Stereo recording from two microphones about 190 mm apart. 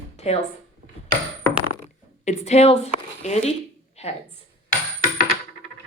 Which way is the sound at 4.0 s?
35° left (ahead or behind).